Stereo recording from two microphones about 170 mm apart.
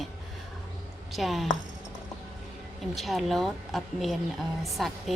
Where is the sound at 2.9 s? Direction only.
Centre (ahead or behind).